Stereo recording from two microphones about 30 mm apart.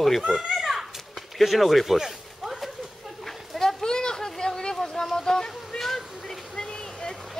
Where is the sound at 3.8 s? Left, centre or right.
Left.